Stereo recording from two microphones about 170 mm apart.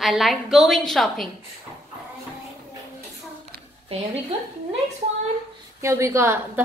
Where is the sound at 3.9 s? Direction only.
35° right (ahead or behind).